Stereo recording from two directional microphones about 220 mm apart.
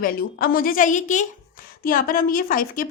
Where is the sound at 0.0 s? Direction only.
40° left (ahead or behind).